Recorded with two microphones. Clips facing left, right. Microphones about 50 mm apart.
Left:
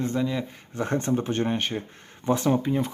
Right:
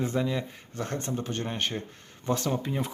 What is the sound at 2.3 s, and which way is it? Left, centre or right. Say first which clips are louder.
Speech: left 6 dB; centre.